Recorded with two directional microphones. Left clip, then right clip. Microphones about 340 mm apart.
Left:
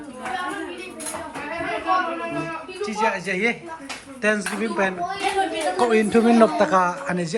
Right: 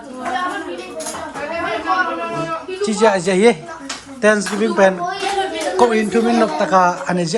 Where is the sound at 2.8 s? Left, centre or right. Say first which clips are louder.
Right 8 dB; centre.